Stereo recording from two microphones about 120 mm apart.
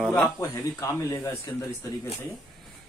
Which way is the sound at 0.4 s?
25° left (ahead or behind).